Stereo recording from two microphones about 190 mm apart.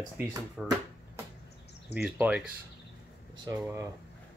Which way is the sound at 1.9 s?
10° right (ahead or behind).